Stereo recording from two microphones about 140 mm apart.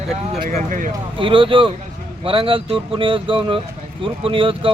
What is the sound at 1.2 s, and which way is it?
Speech, 40° right (ahead or behind).